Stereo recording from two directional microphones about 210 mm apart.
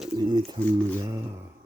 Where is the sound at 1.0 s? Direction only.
15° right (ahead or behind).